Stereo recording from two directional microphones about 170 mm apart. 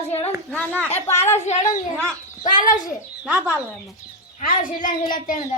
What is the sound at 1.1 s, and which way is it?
Speech, 40° left (ahead or behind).